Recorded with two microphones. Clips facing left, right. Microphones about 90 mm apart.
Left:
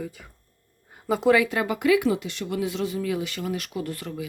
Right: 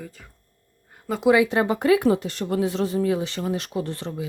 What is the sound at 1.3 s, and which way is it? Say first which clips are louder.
Speech: right 3 dB; 25° right (ahead or behind).